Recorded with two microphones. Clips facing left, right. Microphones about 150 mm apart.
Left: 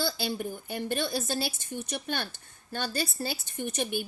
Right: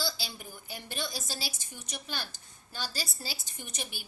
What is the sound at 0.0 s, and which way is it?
A woman's voice, 55° left (ahead or behind).